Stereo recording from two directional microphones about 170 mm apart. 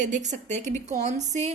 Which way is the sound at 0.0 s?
45° right (ahead or behind).